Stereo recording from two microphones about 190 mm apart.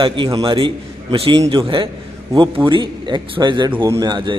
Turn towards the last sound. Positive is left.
turn(degrees=-25)  # may be behind; listen again after turning